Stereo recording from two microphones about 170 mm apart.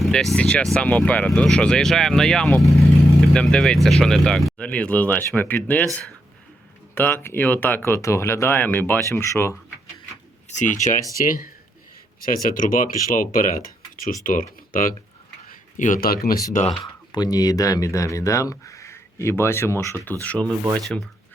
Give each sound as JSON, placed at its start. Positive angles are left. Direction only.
{"t": 0.0, "sound": "vehicle", "side_deg": 0}
{"t": 0.3, "sound": "speech", "side_deg": 5}
{"t": 10.5, "sound": "speech", "side_deg": 45}
{"t": 16.5, "sound": "speech", "side_deg": 45}
{"t": 17.1, "sound": "speech", "side_deg": 20}